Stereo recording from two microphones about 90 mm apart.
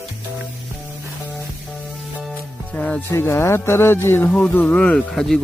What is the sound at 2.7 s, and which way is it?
Speech, 10° left (ahead or behind).